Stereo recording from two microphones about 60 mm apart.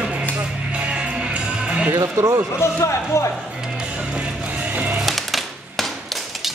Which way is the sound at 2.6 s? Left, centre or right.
Left.